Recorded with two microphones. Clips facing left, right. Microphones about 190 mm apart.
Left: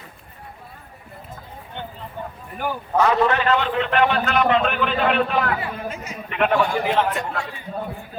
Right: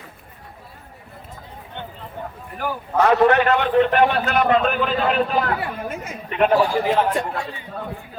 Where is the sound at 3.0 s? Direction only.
55° right (ahead or behind); by 7.2 s 35° right (ahead or behind).